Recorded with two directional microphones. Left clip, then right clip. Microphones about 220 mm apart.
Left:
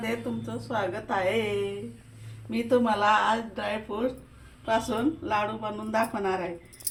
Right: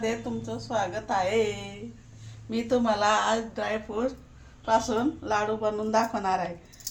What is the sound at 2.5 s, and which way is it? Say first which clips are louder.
A woman's voice: left 1 dB; 30° right (ahead or behind).